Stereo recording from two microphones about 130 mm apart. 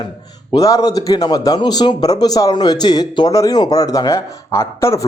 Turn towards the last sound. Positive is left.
turn(degrees=20)  # may be behind; listen again after turning